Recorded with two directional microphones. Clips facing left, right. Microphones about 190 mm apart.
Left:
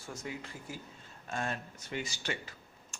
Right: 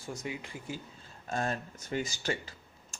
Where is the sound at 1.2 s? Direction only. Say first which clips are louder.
Right 4 dB; 35° right (ahead or behind).